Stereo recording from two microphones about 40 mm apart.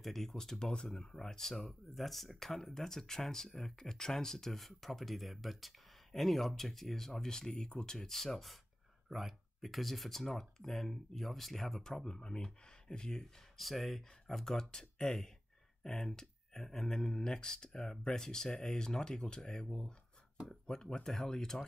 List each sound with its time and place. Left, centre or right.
0.0 s speech: centre
13.2 s speech: centre